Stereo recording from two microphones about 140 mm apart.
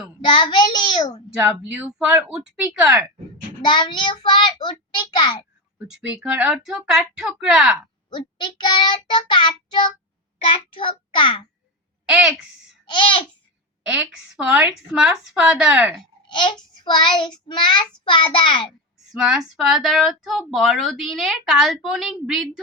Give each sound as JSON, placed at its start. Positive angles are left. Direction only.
{"t": 0.3, "sound": "a child's voice", "side_deg": 30}
{"t": 1.7, "sound": "a woman's voice", "side_deg": -10}
{"t": 3.6, "sound": "a child's voice", "side_deg": 30}
{"t": 5.9, "sound": "speech", "side_deg": -10}
{"t": 8.1, "sound": "a child's voice", "side_deg": 35}
{"t": 12.0, "sound": "speech", "side_deg": -5}
{"t": 12.8, "sound": "babbling", "side_deg": 35}
{"t": 13.8, "sound": "a woman's voice", "side_deg": -5}
{"t": 16.3, "sound": "a child's voice", "side_deg": 35}
{"t": 16.7, "sound": "child singing", "side_deg": 30}
{"t": 17.5, "sound": "a child's voice", "side_deg": 30}
{"t": 19.2, "sound": "speech", "side_deg": -5}